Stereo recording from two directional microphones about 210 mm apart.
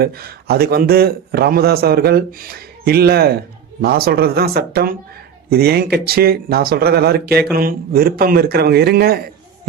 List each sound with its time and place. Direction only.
0.0 s speech: 45° right (ahead or behind)